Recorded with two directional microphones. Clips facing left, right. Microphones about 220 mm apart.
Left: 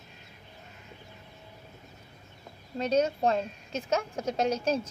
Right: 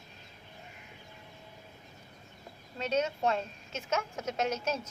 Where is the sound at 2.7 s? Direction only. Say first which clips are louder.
Left 5 dB; 35° left (ahead or behind).